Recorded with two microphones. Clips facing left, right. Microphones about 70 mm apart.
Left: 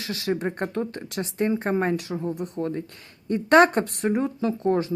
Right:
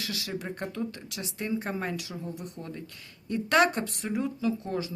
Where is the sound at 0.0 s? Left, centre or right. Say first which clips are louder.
Left 8 dB; left.